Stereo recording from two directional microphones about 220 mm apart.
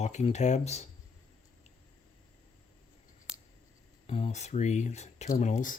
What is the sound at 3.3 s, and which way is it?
Scissors, 5° right (ahead or behind).